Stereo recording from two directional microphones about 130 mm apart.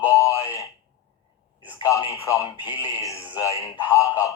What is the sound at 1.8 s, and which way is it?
Speech, 25° left (ahead or behind).